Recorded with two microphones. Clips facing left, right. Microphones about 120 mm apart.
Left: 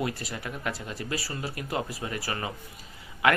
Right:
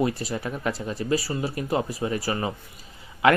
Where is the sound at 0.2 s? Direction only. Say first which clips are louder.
Right 6 dB; 25° right (ahead or behind).